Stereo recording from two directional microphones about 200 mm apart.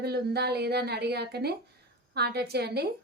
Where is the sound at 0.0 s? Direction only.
55° right (ahead or behind).